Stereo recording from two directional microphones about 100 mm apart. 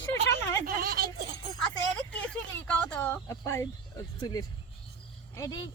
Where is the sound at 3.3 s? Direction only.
30° left (ahead or behind).